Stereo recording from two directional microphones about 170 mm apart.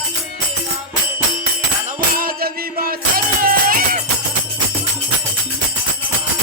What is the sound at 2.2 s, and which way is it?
Music, 60° right (ahead or behind).